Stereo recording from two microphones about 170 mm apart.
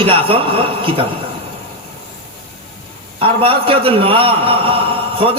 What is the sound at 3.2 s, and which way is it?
A man's voice, 35° right (ahead or behind).